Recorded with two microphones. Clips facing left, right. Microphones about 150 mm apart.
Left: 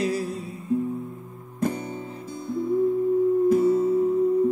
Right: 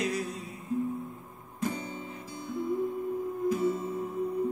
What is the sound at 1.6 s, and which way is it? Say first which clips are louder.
Guitar: left 6 dB; 50° left (ahead or behind).